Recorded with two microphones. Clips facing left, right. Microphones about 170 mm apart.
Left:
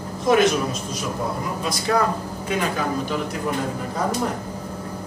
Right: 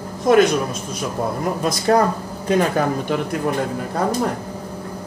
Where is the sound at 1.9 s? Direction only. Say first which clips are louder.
Right 5 dB; 45° right (ahead or behind).